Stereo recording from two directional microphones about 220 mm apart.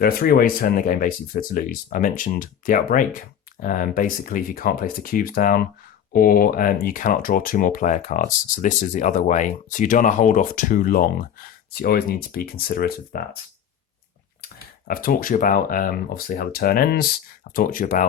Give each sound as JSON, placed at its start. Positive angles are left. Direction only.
{"t": 0.0, "sound": "speech", "side_deg": 40}
{"t": 14.8, "sound": "speech", "side_deg": 40}